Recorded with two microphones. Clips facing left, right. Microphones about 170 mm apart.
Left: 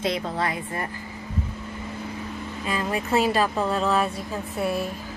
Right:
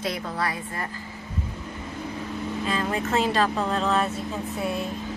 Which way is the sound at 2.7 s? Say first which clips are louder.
Left 2 dB; 10° left (ahead or behind).